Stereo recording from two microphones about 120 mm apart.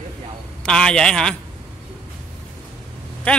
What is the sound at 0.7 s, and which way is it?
Speech, 5° left (ahead or behind).